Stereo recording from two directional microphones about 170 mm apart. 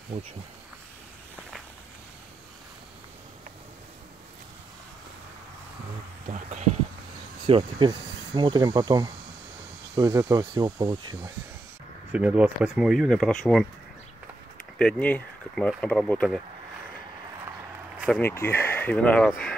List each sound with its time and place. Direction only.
0.1 s speech: 40° right (ahead or behind)
6.2 s speech: 45° right (ahead or behind)
7.4 s speech: 35° right (ahead or behind)
12.1 s speech: 10° right (ahead or behind)
14.8 s speech: 5° left (ahead or behind)
18.0 s speech: 10° left (ahead or behind)